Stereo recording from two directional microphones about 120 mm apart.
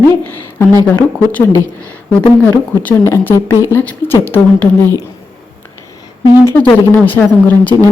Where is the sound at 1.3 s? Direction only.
15° left (ahead or behind).